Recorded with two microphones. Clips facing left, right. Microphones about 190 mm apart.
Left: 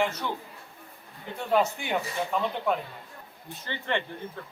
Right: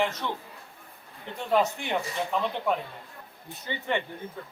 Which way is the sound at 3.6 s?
15° right (ahead or behind).